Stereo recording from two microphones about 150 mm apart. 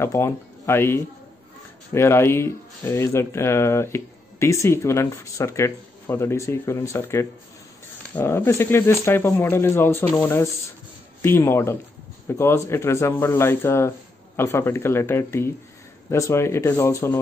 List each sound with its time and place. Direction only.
0.0 s speech: 15° left (ahead or behind)